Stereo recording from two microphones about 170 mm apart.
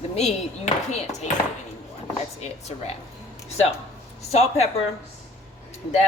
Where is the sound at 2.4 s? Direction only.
40° left (ahead or behind).